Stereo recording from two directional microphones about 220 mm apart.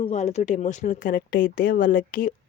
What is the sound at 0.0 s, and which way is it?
Speech, 30° left (ahead or behind).